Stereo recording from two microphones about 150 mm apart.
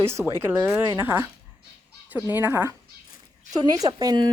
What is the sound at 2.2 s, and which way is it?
A woman's voice, 15° right (ahead or behind).